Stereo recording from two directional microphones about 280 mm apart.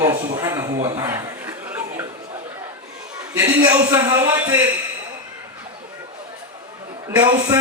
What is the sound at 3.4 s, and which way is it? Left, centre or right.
A man's voice, centre.